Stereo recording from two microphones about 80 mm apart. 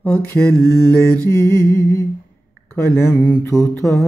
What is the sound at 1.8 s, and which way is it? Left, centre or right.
Humming, left.